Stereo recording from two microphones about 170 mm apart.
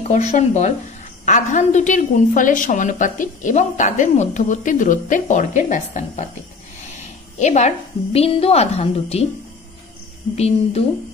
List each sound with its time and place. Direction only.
0.3 s a woman's voice: 45° left (ahead or behind)
10.3 s speech: 40° left (ahead or behind)